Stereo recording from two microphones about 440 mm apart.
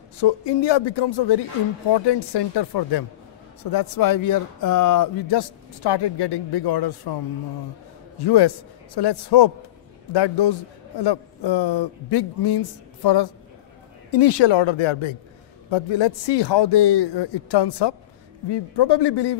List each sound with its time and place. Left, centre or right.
0.2 s speech: left
8.2 s speech: left
14.1 s speech: left